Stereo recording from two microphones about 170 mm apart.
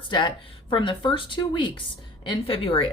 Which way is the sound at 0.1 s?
25° left (ahead or behind).